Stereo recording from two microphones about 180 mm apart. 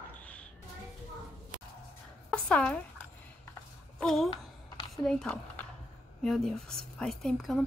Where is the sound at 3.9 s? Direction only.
Centre (ahead or behind).